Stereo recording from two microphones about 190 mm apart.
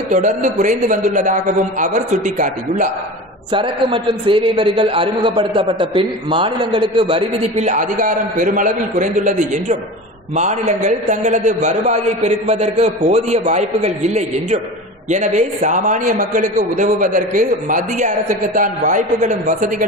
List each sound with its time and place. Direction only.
0.1 s a man's voice: 40° right (ahead or behind)
3.5 s a man's voice: 25° right (ahead or behind)